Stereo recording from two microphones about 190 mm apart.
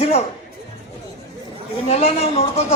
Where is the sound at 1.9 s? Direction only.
30° left (ahead or behind).